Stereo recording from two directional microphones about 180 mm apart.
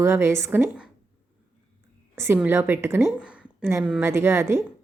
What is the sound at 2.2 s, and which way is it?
A woman's voice, 10° right (ahead or behind).